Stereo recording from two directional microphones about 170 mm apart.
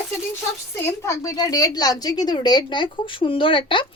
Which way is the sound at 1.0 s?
20° left (ahead or behind).